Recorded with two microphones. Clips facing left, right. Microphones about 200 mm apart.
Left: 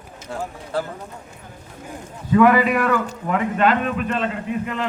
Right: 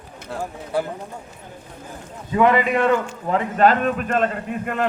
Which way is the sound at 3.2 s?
35° right (ahead or behind).